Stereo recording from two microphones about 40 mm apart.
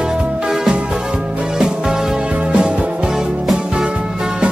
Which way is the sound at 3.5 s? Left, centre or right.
Right.